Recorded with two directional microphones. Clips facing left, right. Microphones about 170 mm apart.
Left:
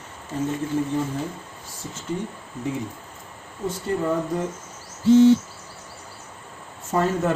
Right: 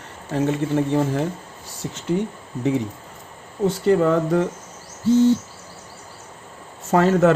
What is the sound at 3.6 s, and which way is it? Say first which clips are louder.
Speech: right 7 dB; 85° right.